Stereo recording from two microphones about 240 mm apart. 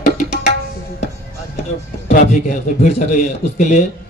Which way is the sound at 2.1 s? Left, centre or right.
Left.